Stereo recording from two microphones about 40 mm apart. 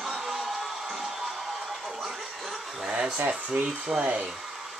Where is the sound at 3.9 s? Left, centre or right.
Right.